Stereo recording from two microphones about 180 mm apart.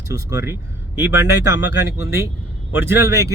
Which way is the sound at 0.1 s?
15° right (ahead or behind).